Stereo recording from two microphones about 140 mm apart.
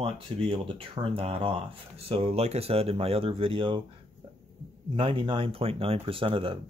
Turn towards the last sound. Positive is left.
turn(degrees=-40)  # may be behind; listen again after turning